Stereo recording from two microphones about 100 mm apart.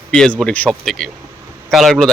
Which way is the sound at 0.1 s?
5° left (ahead or behind).